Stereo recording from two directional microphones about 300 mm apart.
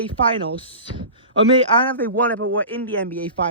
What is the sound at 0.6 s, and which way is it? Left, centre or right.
Speech, centre.